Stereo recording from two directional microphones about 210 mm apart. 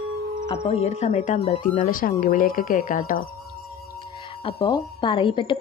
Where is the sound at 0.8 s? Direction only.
30° left (ahead or behind).